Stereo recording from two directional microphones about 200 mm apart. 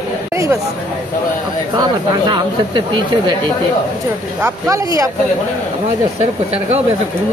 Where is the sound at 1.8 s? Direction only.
20° right (ahead or behind).